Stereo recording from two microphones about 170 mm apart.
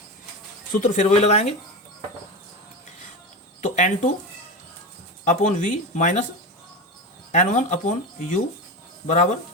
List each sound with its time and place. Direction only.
0.7 s speech: 45° left (ahead or behind)
3.6 s speech: 50° left (ahead or behind)
5.2 s speech: 50° left (ahead or behind)
7.3 s speech: 45° left (ahead or behind)